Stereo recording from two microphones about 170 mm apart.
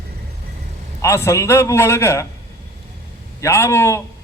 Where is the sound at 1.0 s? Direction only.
15° left (ahead or behind).